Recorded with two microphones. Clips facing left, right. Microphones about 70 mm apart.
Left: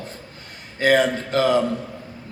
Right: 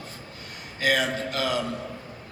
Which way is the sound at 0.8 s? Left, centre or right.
Left.